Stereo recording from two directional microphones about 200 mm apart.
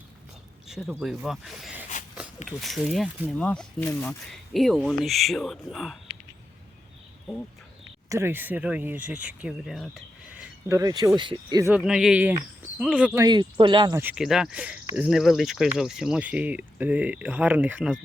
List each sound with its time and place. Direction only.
0.7 s speech: centre (ahead or behind)
8.1 s speech: 10° right (ahead or behind)
11.7 s speech: 5° right (ahead or behind)
13.2 s speech: 20° right (ahead or behind)
14.0 s speech: 5° right (ahead or behind)